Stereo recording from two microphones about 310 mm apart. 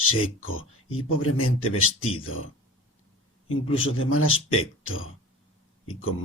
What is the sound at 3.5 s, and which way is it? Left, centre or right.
Speech, left.